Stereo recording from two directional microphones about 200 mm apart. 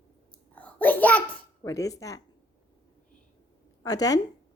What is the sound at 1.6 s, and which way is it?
Speech, 15° left (ahead or behind).